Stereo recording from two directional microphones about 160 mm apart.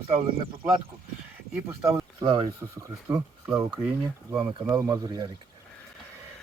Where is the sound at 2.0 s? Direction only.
25° right (ahead or behind).